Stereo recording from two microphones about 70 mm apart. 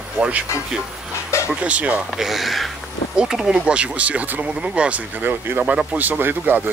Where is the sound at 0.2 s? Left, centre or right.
Centre.